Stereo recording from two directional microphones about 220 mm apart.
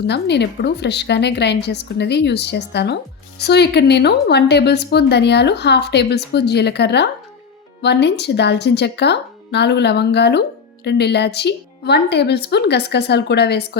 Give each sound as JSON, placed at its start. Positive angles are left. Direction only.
{"t": 0.1, "sound": "a woman's voice", "side_deg": 50}